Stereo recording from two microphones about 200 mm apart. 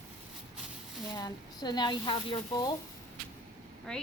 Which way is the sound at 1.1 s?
20° left (ahead or behind).